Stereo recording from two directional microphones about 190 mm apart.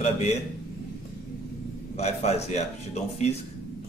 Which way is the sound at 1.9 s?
35° left (ahead or behind).